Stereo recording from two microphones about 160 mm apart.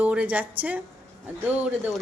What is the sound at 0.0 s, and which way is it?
Speech, 10° right (ahead or behind).